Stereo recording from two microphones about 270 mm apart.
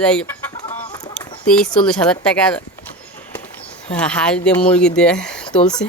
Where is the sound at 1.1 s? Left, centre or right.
Centre.